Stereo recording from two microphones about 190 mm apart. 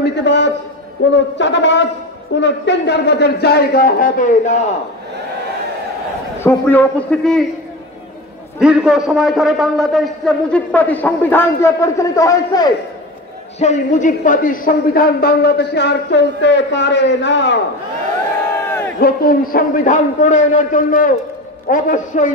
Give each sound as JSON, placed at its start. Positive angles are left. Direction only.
{"t": 0.0, "sound": "a man's voice", "side_deg": 65}
{"t": 6.4, "sound": "a man's voice", "side_deg": 10}
{"t": 8.5, "sound": "a man's voice", "side_deg": -5}
{"t": 13.6, "sound": "speech", "side_deg": 40}
{"t": 18.7, "sound": "crowd", "side_deg": 10}
{"t": 18.9, "sound": "a man's voice", "side_deg": 55}